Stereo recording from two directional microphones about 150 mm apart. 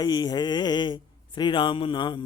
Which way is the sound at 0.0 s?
25° left (ahead or behind).